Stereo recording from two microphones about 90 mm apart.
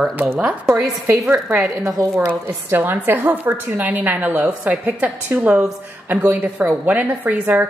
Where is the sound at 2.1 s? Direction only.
20° right (ahead or behind).